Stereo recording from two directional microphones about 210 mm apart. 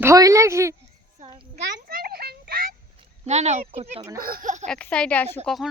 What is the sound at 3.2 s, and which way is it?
Speech, 30° right (ahead or behind).